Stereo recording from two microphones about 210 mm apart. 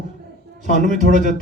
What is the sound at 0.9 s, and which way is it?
Speech, 35° right (ahead or behind).